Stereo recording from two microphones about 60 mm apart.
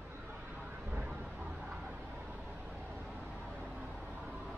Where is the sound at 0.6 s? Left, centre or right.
Right.